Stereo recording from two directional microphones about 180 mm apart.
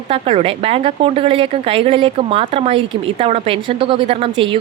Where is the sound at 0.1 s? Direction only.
35° right (ahead or behind).